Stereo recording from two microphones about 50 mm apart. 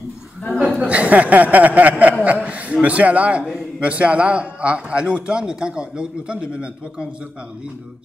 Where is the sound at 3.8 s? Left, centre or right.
Right.